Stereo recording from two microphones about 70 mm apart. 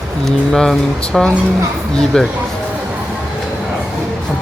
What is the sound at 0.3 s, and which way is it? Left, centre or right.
Speech, centre.